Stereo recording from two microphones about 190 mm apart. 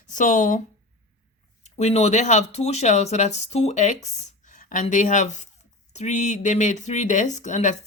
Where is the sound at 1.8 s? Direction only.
35° left (ahead or behind).